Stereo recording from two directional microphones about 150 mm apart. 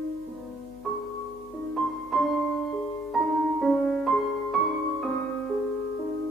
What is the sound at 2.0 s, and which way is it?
Music, centre (ahead or behind).